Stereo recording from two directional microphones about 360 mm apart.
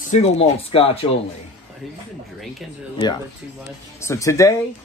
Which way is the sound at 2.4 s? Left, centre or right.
Centre.